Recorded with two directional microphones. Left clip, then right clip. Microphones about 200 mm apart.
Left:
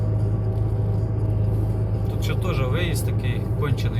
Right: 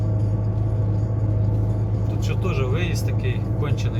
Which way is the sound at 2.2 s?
20° left (ahead or behind).